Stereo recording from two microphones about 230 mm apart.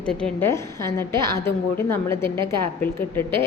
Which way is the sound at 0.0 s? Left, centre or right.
Centre.